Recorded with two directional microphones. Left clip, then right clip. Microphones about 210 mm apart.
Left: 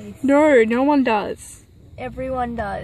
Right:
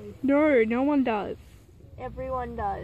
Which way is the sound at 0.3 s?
5° left (ahead or behind).